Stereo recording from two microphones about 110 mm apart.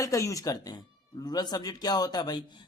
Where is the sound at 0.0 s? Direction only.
30° left (ahead or behind).